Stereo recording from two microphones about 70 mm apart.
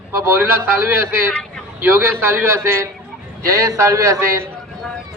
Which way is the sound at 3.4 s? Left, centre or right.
Right.